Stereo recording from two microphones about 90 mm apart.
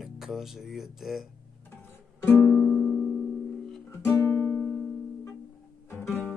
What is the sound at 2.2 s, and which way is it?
Music, 25° left (ahead or behind).